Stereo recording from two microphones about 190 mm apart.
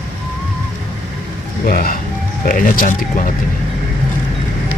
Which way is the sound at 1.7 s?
50° left (ahead or behind).